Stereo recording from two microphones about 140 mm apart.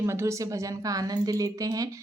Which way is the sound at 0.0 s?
20° right (ahead or behind).